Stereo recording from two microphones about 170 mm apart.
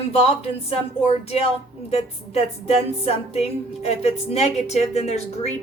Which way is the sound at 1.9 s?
35° left (ahead or behind).